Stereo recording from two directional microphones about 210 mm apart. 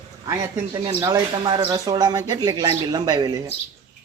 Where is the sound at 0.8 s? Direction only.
20° right (ahead or behind).